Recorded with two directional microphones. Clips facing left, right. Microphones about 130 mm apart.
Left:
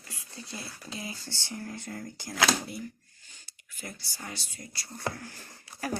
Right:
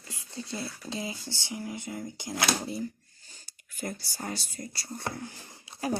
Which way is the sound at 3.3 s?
40° right (ahead or behind).